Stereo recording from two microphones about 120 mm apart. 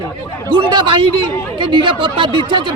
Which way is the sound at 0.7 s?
45° right (ahead or behind).